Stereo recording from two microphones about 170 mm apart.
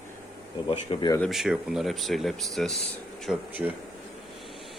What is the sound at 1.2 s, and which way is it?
Speech, centre (ahead or behind).